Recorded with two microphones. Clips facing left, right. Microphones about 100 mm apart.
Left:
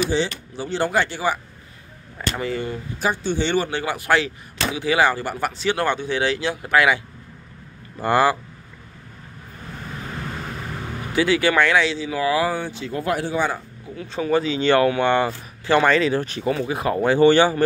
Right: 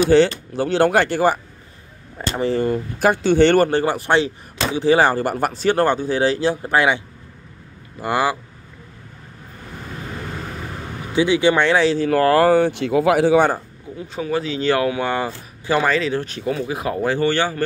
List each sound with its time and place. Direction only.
0.6 s speech: 60° right (ahead or behind)
2.1 s speech: 30° right (ahead or behind)
2.7 s speech: 55° right (ahead or behind); by 7.0 s 30° right (ahead or behind)
8.0 s speech: 15° right (ahead or behind)
11.1 s speech: 20° right (ahead or behind)
12.0 s speech: 55° right (ahead or behind); by 13.5 s 90° right
14.1 s speech: centre (ahead or behind)
17.2 s speech: 15° left (ahead or behind)